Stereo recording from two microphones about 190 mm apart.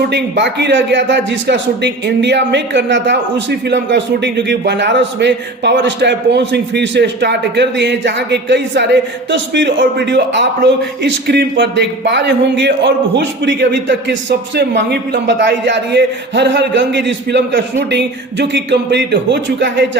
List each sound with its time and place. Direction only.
0.1 s speech: 65° right (ahead or behind)